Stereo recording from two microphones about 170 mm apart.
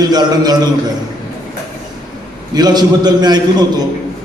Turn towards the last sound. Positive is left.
turn(degrees=-25)  # may be behind; listen again after turning